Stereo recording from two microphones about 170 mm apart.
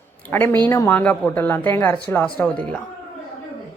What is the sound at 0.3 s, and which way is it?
A woman's voice, 10° left (ahead or behind).